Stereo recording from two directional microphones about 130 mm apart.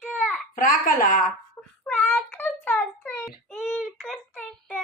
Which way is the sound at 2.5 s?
10° left (ahead or behind).